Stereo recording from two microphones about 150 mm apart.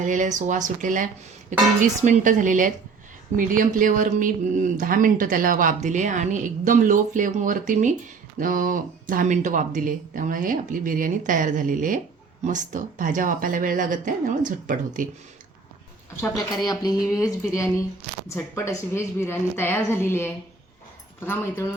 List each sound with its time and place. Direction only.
0.0 s speech: 55° right (ahead or behind)
16.2 s speech: 25° left (ahead or behind)
18.3 s a woman's voice: 20° left (ahead or behind)